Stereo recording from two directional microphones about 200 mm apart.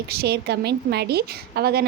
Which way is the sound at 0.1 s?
55° right (ahead or behind).